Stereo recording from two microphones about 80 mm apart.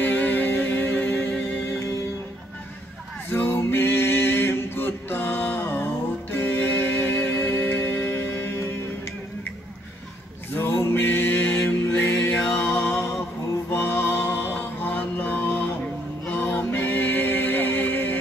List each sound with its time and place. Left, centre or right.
0.0 s music: left
3.3 s a sound: left
6.3 s music: left
10.5 s music: left
13.7 s music: left